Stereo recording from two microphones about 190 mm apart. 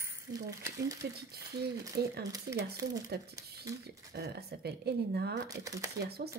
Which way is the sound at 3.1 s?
60° right (ahead or behind).